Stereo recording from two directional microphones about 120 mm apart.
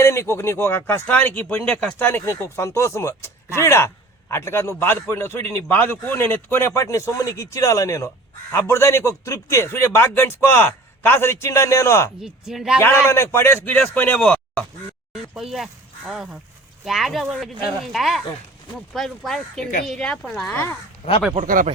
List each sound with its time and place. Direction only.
0.0 s speech: 20° left (ahead or behind)
12.2 s speech: 5° right (ahead or behind)
12.8 s a man's voice: 20° left (ahead or behind); by 20.5 s 5° left (ahead or behind)
20.5 s a man's voice: 20° left (ahead or behind)